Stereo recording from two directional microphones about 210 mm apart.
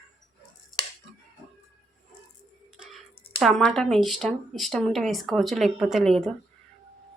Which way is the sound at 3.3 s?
Centre (ahead or behind).